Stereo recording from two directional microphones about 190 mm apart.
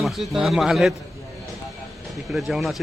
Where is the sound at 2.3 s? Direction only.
Centre (ahead or behind).